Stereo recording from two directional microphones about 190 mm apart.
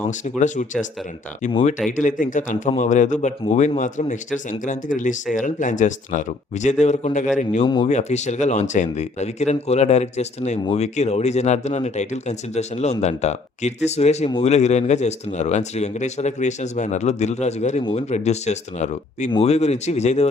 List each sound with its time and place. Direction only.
0.3 s speech: 40° left (ahead or behind)
1.5 s speech: 30° left (ahead or behind)
2.0 s speech: 45° left (ahead or behind)
7.6 s speech: 25° left (ahead or behind)
7.9 s speech: 35° left (ahead or behind)